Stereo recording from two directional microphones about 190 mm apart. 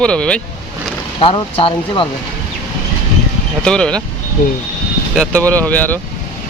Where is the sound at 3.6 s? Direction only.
5° left (ahead or behind).